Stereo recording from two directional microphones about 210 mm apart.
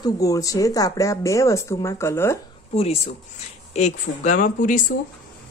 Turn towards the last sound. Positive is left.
turn(degrees=40)  # may be behind; listen again after turning